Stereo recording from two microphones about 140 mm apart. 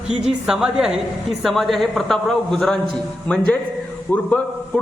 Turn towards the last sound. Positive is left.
turn(degrees=5)  # may be behind; listen again after turning